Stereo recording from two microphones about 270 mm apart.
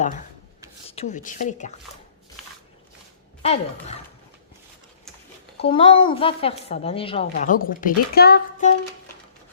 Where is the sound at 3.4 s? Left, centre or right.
Left.